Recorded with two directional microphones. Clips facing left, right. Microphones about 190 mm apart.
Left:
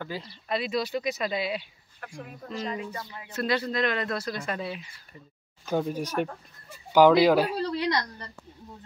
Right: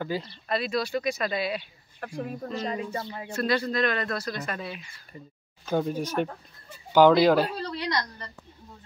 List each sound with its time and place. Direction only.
0.0 s speech: centre (ahead or behind)
0.5 s speech: 15° left (ahead or behind)
2.0 s speech: 35° right (ahead or behind)
3.3 s speech: 20° left (ahead or behind)
5.7 s speech: 5° left (ahead or behind)